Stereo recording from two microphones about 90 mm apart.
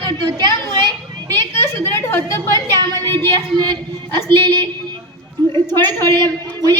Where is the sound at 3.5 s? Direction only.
55° right (ahead or behind).